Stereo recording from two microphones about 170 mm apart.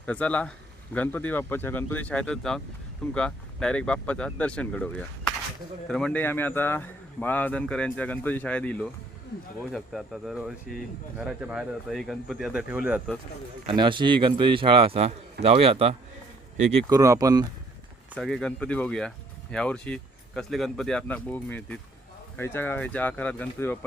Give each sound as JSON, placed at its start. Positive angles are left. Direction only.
{"t": 0.0, "sound": "speech", "side_deg": 5}
{"t": 13.7, "sound": "speech", "side_deg": -30}
{"t": 16.9, "sound": "speech", "side_deg": -20}
{"t": 18.2, "sound": "speech", "side_deg": 5}